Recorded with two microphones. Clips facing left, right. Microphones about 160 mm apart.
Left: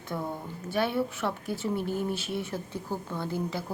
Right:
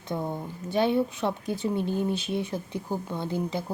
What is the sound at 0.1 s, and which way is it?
Speech, 20° right (ahead or behind).